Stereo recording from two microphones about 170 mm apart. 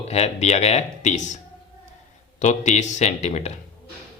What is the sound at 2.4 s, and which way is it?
Speech, 45° left (ahead or behind).